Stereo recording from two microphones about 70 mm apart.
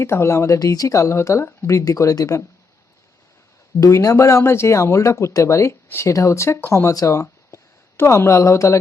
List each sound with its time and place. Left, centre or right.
0.0 s speech: left
3.8 s speech: left
6.9 s speech: left